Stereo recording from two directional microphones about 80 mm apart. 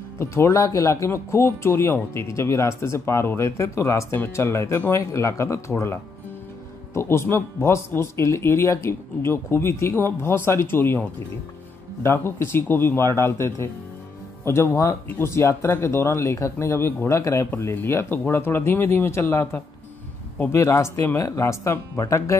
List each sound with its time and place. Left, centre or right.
0.2 s speech: left
17.5 s speech: left